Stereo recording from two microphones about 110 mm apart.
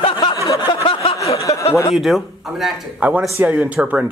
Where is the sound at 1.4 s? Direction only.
30° left (ahead or behind).